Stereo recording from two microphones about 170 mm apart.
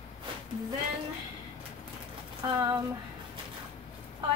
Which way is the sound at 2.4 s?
25° right (ahead or behind).